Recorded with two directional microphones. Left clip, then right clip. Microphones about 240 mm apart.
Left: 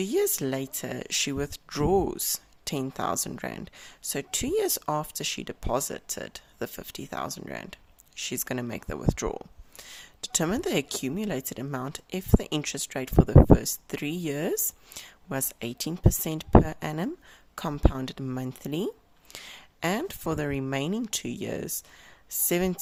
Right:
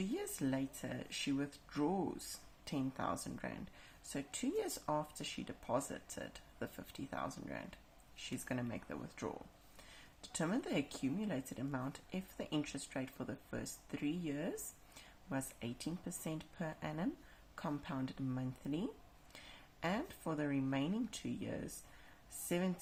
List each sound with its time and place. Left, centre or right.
0.0 s speech: left